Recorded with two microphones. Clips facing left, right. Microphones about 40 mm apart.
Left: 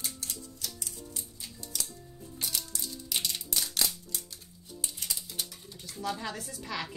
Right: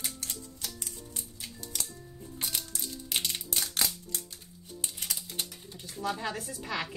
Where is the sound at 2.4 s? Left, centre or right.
Right.